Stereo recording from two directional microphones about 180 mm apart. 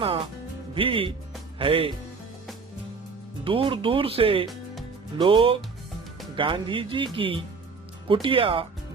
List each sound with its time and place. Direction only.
0.7 s speech: 30° right (ahead or behind)
3.4 s speech: 30° right (ahead or behind)